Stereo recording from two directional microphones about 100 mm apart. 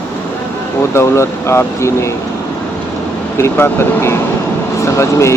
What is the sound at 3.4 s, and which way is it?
Speech, 25° left (ahead or behind).